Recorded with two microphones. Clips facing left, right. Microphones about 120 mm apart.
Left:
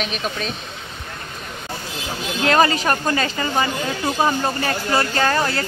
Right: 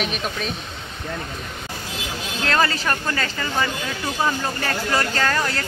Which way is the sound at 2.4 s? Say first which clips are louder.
Left 5 dB; 20° left (ahead or behind).